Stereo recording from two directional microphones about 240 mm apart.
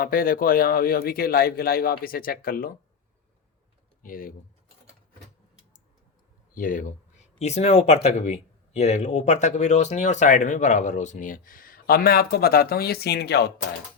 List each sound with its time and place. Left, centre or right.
0.0 s speech: left
4.0 s speech: left
6.5 s speech: left